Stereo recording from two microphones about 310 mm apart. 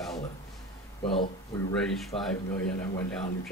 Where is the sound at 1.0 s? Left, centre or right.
Centre.